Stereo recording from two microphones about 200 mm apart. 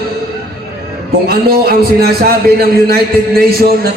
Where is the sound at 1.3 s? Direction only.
50° right (ahead or behind).